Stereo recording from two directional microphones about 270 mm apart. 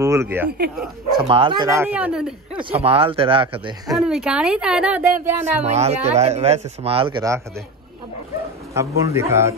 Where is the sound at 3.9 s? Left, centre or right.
Centre.